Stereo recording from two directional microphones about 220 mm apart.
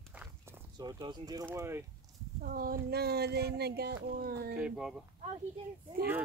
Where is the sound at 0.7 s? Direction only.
20° right (ahead or behind).